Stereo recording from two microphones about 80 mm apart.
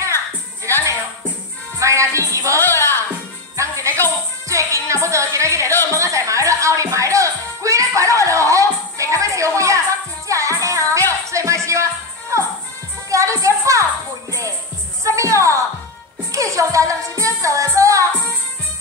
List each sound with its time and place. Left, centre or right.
1.8 s music: right
2.6 s music: left
3.5 s music: right
15.0 s music: right